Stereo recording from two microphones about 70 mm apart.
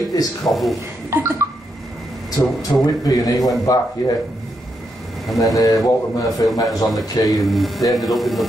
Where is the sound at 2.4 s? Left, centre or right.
Left.